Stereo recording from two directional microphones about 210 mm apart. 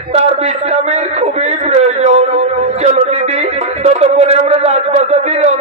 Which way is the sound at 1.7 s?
30° right (ahead or behind).